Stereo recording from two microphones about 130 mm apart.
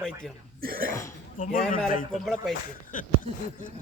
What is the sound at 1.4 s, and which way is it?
Speech, 90° left.